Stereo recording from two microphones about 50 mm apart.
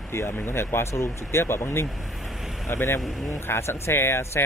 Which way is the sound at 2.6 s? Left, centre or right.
Left.